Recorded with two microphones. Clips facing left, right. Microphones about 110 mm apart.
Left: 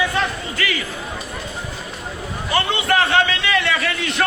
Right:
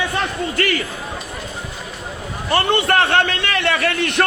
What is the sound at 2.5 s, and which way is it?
A man's voice, 55° right (ahead or behind).